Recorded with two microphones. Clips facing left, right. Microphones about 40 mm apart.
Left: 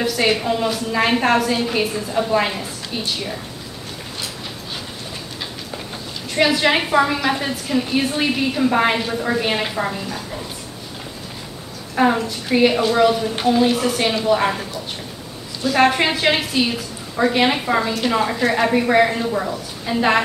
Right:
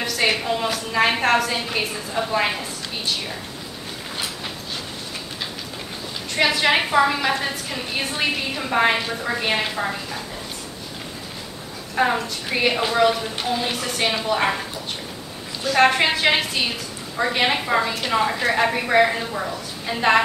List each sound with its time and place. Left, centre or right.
0.0 s a woman's voice: centre
6.3 s a woman's voice: centre
11.9 s a woman's voice: centre
15.7 s a woman's voice: centre